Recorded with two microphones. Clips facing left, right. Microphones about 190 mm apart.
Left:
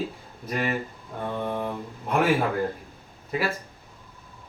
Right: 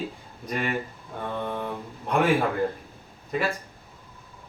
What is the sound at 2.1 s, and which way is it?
Speech, centre (ahead or behind).